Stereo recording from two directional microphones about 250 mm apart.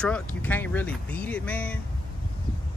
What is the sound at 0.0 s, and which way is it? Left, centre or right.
Speech, centre.